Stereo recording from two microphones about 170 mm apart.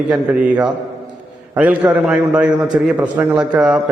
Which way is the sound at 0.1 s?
10° right (ahead or behind).